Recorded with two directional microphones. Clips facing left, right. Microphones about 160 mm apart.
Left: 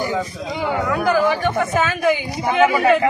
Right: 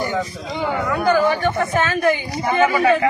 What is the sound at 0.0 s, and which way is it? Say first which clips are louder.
Speech: even; 10° left (ahead or behind).